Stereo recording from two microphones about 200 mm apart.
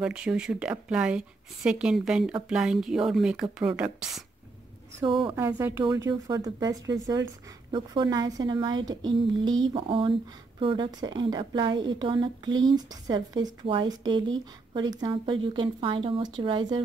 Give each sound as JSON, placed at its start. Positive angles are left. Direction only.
{"t": 0.0, "sound": "speech", "side_deg": -5}